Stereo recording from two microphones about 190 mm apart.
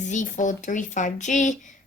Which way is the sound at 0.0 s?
40° left (ahead or behind).